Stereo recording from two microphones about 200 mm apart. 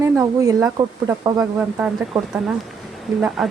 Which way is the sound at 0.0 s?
15° right (ahead or behind).